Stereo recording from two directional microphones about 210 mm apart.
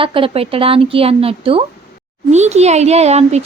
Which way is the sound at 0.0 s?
25° right (ahead or behind).